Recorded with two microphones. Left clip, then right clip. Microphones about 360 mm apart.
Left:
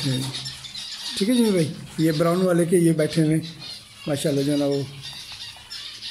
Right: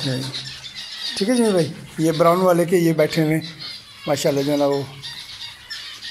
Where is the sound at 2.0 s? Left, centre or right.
Right.